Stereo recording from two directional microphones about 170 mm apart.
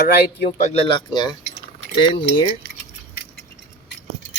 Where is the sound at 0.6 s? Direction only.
35° left (ahead or behind).